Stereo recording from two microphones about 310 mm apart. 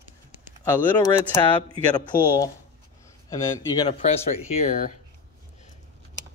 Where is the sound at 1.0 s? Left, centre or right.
Centre.